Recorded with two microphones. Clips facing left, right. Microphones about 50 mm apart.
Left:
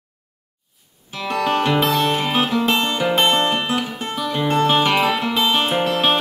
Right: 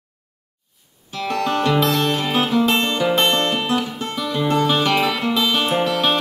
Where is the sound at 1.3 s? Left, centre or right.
Centre.